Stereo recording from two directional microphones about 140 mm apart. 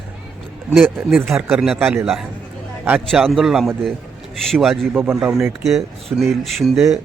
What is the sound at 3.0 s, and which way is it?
Speech, centre (ahead or behind).